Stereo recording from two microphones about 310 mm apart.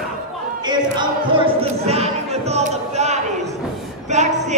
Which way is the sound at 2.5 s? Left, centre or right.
Right.